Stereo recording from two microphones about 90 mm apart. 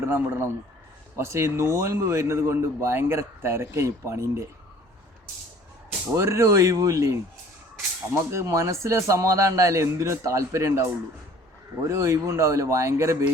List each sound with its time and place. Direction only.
0.0 s speech: 25° right (ahead or behind)
6.1 s speech: 35° right (ahead or behind)
11.9 s speech: 35° right (ahead or behind)